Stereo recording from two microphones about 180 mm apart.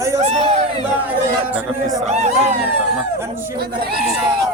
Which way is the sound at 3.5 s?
60° right (ahead or behind).